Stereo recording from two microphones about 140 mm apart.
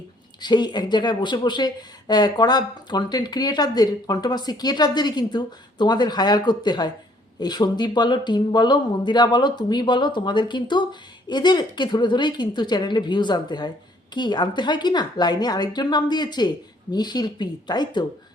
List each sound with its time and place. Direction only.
0.4 s speech: 30° left (ahead or behind)